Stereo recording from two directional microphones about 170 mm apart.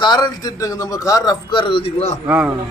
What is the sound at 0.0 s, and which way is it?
A man's voice, 25° left (ahead or behind).